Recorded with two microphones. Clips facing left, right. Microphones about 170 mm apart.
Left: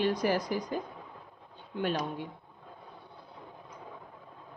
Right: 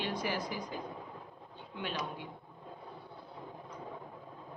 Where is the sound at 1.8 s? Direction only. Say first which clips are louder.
Left 7 dB; 45° left (ahead or behind).